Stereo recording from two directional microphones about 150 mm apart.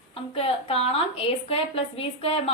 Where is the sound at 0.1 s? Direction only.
40° left (ahead or behind).